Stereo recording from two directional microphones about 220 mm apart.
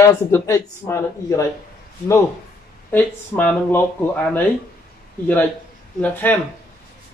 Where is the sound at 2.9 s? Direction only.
10° left (ahead or behind).